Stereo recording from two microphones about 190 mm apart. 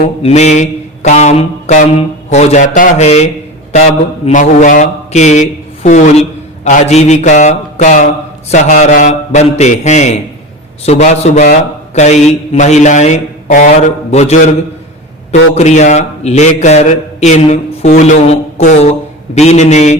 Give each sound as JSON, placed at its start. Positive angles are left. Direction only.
{"t": 0.0, "sound": "a man's voice", "side_deg": 30}
{"t": 4.3, "sound": "a man's voice", "side_deg": 40}
{"t": 15.5, "sound": "a man's voice", "side_deg": 35}